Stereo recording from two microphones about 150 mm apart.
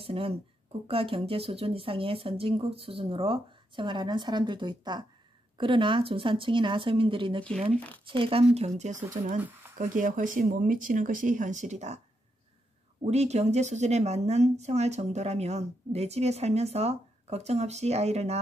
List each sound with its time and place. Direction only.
0.0 s speech: 40° right (ahead or behind)
7.7 s speech: 10° left (ahead or behind)
8.1 s speech: 35° right (ahead or behind)
8.5 s speech: 50° right (ahead or behind)
9.4 s a sound: 15° right (ahead or behind)
9.8 s speech: 60° right (ahead or behind)
13.0 s speech: 45° right (ahead or behind)